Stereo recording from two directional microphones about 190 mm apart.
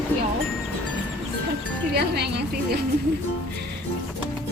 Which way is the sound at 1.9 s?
60° right (ahead or behind).